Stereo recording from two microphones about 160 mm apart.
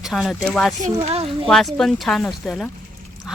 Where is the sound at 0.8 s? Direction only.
40° right (ahead or behind).